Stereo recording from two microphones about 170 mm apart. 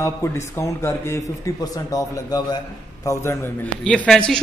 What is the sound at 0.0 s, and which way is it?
A man's voice, 15° left (ahead or behind).